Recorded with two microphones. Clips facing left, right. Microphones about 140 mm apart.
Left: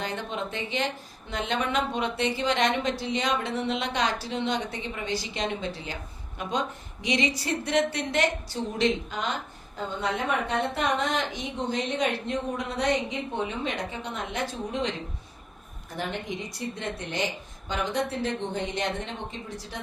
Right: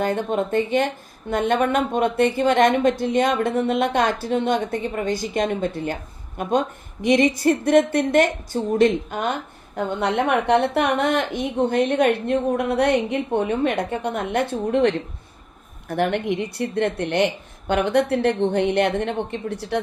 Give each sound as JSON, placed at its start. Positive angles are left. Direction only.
{"t": 0.0, "sound": "a woman's voice", "side_deg": -50}